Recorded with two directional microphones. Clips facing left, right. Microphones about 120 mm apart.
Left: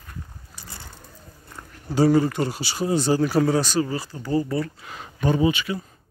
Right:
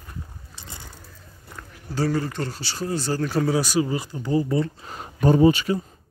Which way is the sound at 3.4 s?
5° right (ahead or behind).